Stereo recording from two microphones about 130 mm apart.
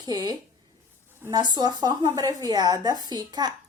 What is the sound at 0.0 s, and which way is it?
Speech, 30° right (ahead or behind).